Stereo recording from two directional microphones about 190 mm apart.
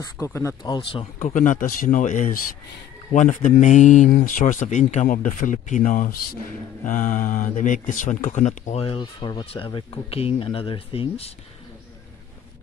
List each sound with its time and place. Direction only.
0.0 s speech: 15° left (ahead or behind)
1.2 s speech: 40° left (ahead or behind)